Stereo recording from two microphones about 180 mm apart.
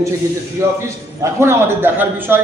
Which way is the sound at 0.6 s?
15° right (ahead or behind).